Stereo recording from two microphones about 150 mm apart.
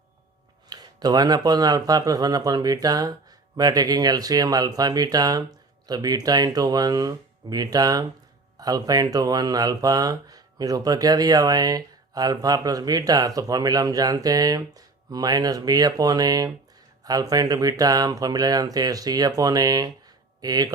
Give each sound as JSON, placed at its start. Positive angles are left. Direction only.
{"t": 0.7, "sound": "speech", "side_deg": -25}